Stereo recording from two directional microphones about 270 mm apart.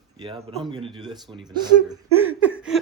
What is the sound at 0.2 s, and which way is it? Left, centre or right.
Speech, centre.